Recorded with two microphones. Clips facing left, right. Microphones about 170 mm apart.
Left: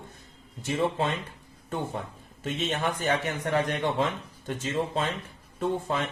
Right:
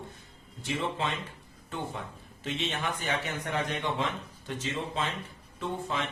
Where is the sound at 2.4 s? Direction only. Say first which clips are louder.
Left 4 dB; 45° left (ahead or behind).